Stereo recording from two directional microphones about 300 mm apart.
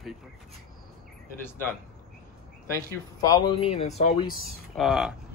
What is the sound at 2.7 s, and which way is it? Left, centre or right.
Speech, centre.